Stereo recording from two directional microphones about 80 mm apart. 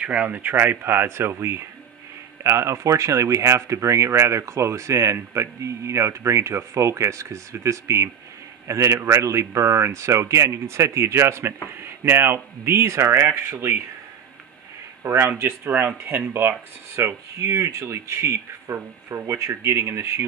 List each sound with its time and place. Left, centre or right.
0.0 s speech: centre; by 13.7 s right
15.0 s speech: right